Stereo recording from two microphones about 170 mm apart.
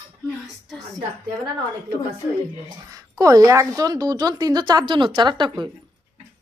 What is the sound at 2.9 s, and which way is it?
A woman's voice, 20° right (ahead or behind).